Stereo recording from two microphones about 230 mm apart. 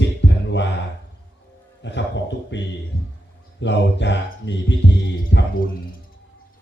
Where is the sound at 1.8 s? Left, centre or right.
Left.